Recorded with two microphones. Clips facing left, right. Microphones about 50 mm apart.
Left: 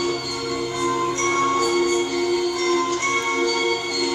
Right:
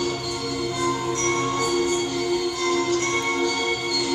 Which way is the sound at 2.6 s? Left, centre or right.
Centre.